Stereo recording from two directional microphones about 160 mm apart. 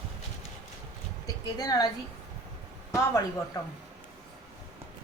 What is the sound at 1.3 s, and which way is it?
Speech, 25° left (ahead or behind).